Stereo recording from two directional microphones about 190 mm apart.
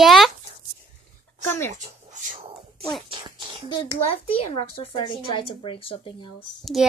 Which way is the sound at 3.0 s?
25° right (ahead or behind).